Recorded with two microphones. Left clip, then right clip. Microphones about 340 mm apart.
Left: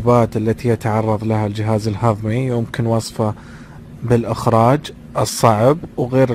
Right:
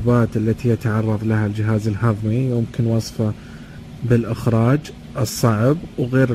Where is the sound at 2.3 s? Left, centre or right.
Left.